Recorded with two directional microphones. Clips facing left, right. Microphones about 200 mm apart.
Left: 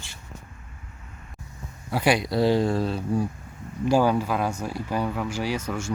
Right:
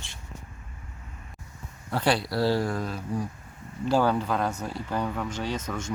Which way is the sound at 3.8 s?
10° left (ahead or behind).